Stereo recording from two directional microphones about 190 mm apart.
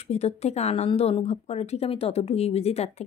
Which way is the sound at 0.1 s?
35° left (ahead or behind).